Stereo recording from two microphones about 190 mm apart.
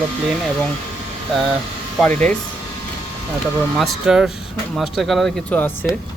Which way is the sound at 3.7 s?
Centre (ahead or behind).